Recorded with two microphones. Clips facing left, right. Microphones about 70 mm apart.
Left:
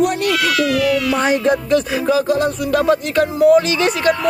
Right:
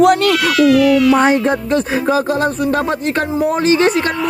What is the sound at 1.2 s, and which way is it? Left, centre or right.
Speech, right.